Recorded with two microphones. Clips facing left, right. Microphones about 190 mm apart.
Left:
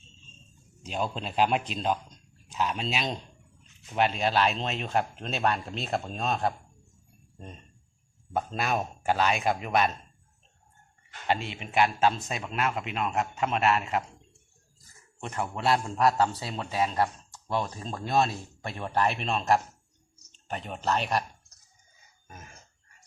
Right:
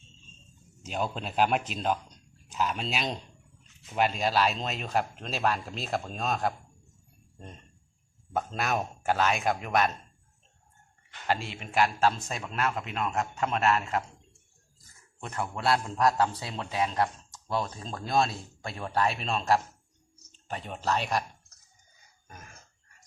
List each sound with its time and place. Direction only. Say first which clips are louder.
0.8 s speech: left 1 dB; 5° right (ahead or behind)
8.5 s speech: left 1 dB; centre (ahead or behind)
9.7 s a man's voice: left 1 dB; 15° left (ahead or behind)
11.3 s a man's voice: left 1 dB; centre (ahead or behind)
15.2 s speech: left 1 dB; 10° left (ahead or behind)
20.5 s speech: left 1 dB; centre (ahead or behind)